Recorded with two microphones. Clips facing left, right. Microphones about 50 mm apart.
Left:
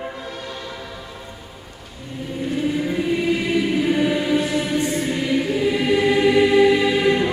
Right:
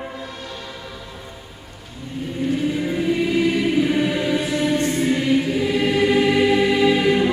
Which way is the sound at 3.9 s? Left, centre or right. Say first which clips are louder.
Left 1 dB; centre.